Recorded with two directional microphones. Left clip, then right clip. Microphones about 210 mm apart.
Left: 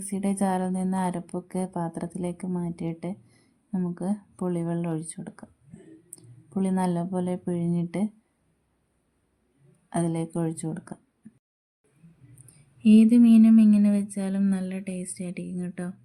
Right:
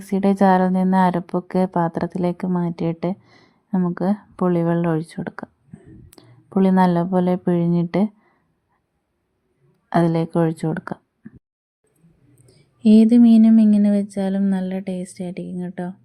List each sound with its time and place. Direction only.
0.1 s speech: 25° right (ahead or behind)
9.9 s speech: 30° right (ahead or behind)
12.5 s speech: 25° right (ahead or behind)